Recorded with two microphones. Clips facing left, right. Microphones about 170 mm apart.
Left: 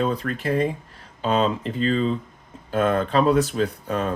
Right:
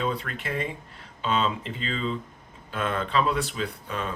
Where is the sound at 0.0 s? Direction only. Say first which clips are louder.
Left 6 dB; 40° left (ahead or behind).